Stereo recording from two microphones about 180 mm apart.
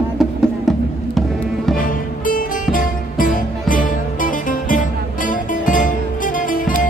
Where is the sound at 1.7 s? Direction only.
50° left (ahead or behind).